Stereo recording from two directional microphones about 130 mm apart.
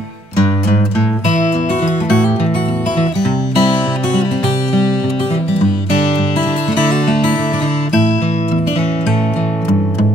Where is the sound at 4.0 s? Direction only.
10° left (ahead or behind).